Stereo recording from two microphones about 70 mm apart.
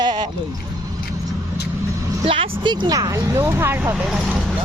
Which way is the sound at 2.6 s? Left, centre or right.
Right.